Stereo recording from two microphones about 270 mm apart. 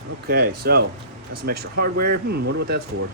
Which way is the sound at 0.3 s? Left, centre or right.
Right.